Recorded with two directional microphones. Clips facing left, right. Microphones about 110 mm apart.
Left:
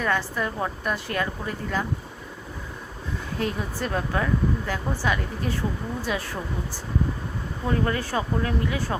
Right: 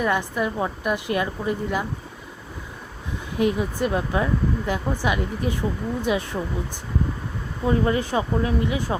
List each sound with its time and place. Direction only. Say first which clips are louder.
0.0 s speech: right 3 dB; 15° right (ahead or behind)
3.3 s speech: right 7 dB; 15° right (ahead or behind)
7.7 s speech: right 4 dB; 20° right (ahead or behind)